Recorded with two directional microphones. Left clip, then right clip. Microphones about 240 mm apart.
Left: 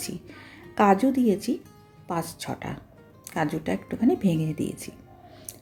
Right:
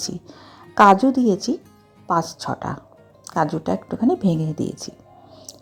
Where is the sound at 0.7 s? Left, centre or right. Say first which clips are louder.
Right 8 dB; centre.